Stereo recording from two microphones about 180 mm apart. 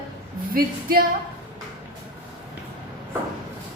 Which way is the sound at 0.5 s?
55° right (ahead or behind).